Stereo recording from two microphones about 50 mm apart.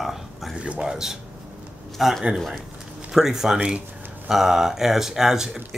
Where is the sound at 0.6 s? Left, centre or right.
Right.